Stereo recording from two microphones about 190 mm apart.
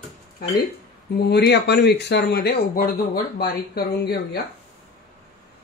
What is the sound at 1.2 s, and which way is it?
Speech, 60° left (ahead or behind).